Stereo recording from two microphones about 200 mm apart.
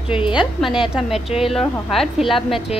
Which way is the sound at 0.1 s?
25° left (ahead or behind).